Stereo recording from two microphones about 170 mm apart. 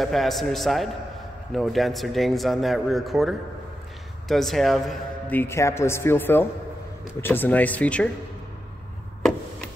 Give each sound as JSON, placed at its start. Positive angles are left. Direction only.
{"t": 0.0, "sound": "speech", "side_deg": 0}
{"t": 5.4, "sound": "a man's voice", "side_deg": 15}